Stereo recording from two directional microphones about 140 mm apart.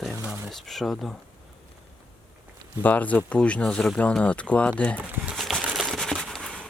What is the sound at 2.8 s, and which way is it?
Speech, 10° left (ahead or behind).